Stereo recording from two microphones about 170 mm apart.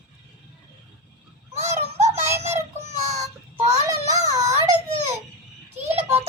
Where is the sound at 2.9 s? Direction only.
40° right (ahead or behind).